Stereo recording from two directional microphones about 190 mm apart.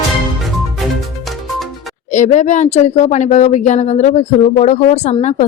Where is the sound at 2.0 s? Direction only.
40° left (ahead or behind).